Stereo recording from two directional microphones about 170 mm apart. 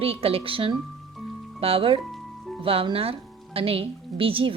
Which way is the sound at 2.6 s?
35° right (ahead or behind).